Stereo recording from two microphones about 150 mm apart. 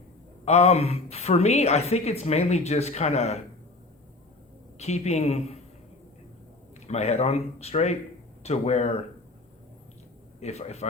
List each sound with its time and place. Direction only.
0.4 s a woman's voice: 45° left (ahead or behind)
4.8 s a woman's voice: 45° left (ahead or behind)
6.7 s a woman's voice: 45° left (ahead or behind)
10.4 s a woman's voice: 50° left (ahead or behind)